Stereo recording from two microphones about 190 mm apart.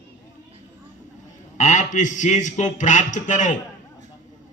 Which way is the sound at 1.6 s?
40° left (ahead or behind).